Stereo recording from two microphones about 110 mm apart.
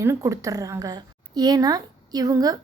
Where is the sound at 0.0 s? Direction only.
25° right (ahead or behind).